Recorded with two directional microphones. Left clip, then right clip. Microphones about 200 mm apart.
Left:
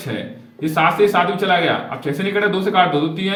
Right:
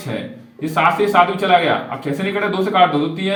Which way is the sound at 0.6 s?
15° right (ahead or behind).